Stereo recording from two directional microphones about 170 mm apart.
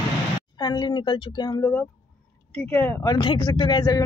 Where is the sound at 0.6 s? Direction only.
25° left (ahead or behind).